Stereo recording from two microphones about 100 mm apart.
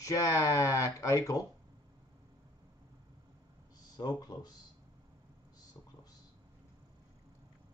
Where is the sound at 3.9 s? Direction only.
45° left (ahead or behind).